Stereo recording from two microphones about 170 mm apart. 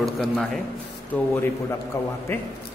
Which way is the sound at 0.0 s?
Centre (ahead or behind).